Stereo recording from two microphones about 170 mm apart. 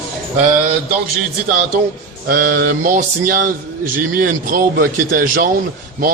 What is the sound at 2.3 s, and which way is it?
A man's voice, 55° right (ahead or behind).